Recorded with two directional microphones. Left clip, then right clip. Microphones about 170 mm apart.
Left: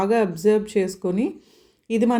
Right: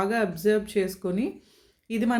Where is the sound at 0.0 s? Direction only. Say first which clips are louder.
Left 5 dB; 20° left (ahead or behind).